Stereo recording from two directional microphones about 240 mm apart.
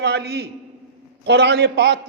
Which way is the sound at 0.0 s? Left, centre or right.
Right.